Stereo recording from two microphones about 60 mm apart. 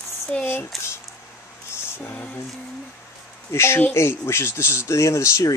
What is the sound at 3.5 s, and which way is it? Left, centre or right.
Speech, left.